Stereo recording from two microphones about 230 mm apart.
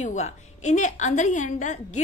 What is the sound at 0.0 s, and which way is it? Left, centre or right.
A woman's voice, left.